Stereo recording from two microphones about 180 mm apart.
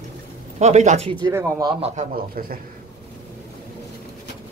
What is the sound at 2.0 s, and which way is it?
Speech, 55° right (ahead or behind).